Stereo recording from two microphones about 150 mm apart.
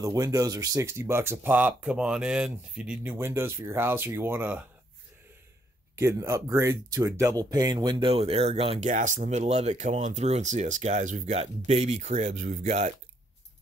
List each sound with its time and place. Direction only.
0.0 s speech: 25° right (ahead or behind)
5.9 s speech: 20° right (ahead or behind); by 12.9 s 50° right (ahead or behind)